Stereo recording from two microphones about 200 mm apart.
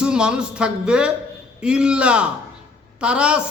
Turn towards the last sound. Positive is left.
turn(degrees=-5)  # may be behind; listen again after turning